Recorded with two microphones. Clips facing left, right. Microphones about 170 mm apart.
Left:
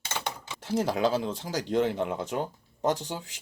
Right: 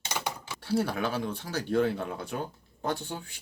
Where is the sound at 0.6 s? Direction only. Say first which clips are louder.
Left 3 dB; 25° left (ahead or behind).